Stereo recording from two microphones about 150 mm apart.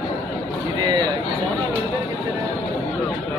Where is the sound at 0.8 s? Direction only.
30° right (ahead or behind).